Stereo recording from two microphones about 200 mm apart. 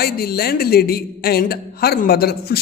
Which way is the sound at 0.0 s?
50° left (ahead or behind).